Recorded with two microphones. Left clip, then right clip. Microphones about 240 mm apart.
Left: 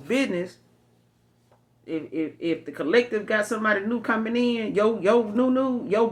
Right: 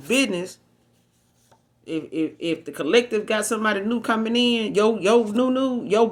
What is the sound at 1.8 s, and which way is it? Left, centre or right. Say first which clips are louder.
Speech: right 3 dB; right.